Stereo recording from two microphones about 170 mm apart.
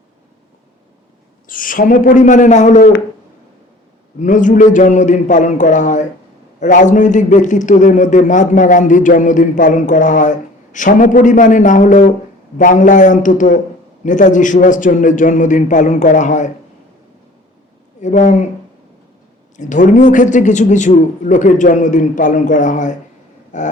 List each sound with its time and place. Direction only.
1.5 s a man's voice: 55° left (ahead or behind)
4.2 s a man's voice: 50° left (ahead or behind)
18.0 s a man's voice: 45° left (ahead or behind)
19.5 s a man's voice: 45° left (ahead or behind)